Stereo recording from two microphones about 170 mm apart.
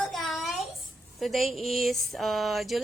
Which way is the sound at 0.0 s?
Centre (ahead or behind).